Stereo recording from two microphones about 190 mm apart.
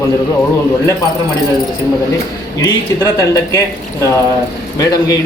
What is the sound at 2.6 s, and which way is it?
Speech, 15° left (ahead or behind).